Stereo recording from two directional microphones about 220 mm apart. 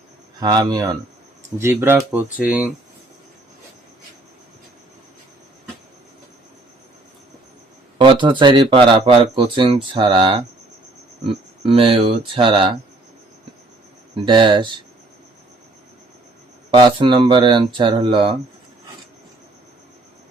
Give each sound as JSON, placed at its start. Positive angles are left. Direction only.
{"t": 0.3, "sound": "speech", "side_deg": -15}
{"t": 7.9, "sound": "speech", "side_deg": -20}
{"t": 14.3, "sound": "speech", "side_deg": -20}
{"t": 16.7, "sound": "speech", "side_deg": -20}